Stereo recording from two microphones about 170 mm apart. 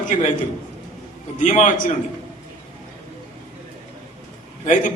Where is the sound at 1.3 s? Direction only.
45° left (ahead or behind).